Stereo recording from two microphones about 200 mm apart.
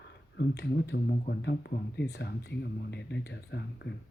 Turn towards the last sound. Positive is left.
turn(degrees=55)  # may be behind; listen again after turning